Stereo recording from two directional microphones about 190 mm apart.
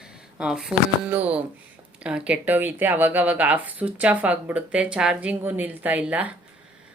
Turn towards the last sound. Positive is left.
turn(degrees=-5)  # may be behind; listen again after turning